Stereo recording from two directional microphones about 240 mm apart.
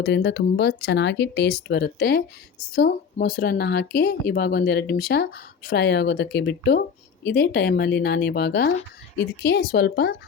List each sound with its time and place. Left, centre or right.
0.0 s speech: left